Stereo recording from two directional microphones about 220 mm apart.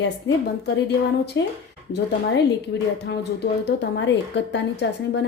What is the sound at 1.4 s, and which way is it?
Speech, 55° left (ahead or behind).